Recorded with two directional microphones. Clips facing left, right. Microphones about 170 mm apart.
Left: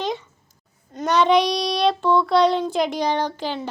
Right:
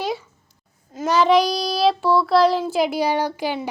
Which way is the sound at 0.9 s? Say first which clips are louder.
Right 1 dB; centre (ahead or behind).